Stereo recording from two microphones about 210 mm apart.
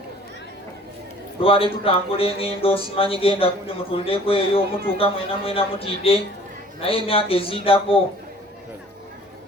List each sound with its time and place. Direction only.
1.4 s a man's voice: 25° left (ahead or behind)